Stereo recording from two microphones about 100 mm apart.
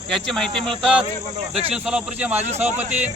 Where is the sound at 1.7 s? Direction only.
10° right (ahead or behind).